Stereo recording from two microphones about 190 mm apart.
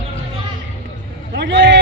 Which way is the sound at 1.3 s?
65° right (ahead or behind).